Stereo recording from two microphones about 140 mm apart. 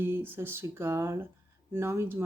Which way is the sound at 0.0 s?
15° right (ahead or behind).